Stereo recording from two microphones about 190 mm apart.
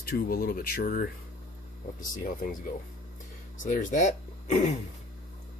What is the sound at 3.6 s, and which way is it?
Speech, 40° left (ahead or behind).